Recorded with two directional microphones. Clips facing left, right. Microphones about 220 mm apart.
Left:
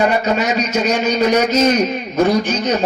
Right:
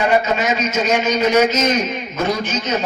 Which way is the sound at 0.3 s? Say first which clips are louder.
Left 2 dB; 40° left (ahead or behind).